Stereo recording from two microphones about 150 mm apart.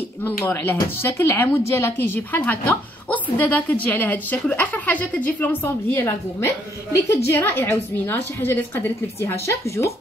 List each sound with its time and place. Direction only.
0.2 s a woman's voice: 15° left (ahead or behind)